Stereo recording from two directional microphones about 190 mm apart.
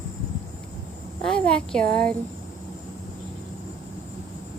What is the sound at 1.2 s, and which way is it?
Speech, 5° left (ahead or behind).